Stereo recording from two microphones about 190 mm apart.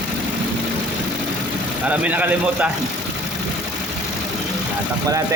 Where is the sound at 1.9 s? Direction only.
10° right (ahead or behind).